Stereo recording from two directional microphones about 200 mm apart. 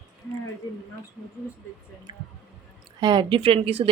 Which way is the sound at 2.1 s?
25° right (ahead or behind).